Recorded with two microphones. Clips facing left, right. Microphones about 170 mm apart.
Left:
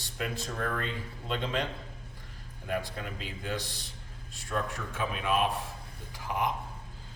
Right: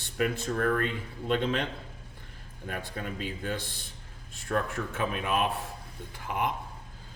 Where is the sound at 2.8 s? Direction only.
50° right (ahead or behind).